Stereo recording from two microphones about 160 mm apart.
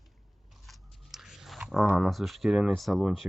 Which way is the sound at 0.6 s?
Centre (ahead or behind).